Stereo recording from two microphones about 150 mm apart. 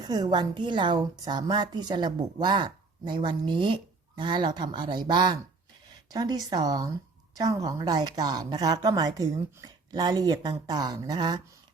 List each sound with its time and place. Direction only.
0.0 s a woman's voice: 25° right (ahead or behind)